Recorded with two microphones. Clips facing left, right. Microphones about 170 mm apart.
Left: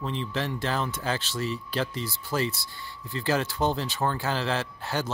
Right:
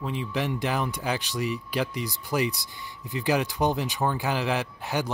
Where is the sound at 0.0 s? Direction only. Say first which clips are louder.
Right 1 dB; 10° right (ahead or behind).